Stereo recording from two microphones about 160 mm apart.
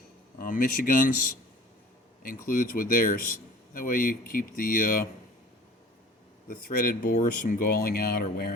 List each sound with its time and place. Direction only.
0.3 s speech: 60° left (ahead or behind)
2.5 s speech: 60° left (ahead or behind)
6.5 s speech: 65° left (ahead or behind)